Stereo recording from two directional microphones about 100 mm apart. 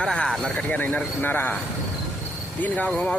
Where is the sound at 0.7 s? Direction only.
15° left (ahead or behind).